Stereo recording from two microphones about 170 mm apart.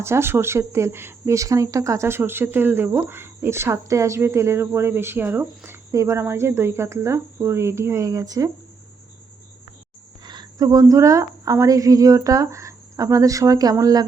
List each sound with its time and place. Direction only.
0.0 s speech: 15° right (ahead or behind)
10.2 s a woman's voice: 25° right (ahead or behind)